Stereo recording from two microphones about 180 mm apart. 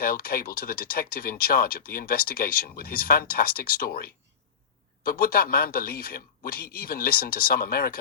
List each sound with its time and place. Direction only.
0.0 s a man's voice: 55° left (ahead or behind)